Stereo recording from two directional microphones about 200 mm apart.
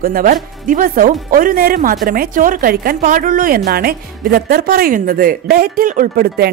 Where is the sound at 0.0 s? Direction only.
45° right (ahead or behind).